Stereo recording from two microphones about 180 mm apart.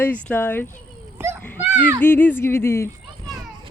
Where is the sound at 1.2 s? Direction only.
10° right (ahead or behind).